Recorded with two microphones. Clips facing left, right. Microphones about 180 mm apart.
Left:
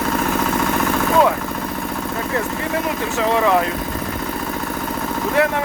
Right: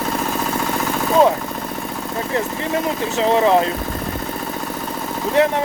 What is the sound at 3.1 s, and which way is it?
Speech, 30° right (ahead or behind).